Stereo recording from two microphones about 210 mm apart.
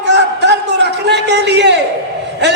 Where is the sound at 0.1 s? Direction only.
55° right (ahead or behind).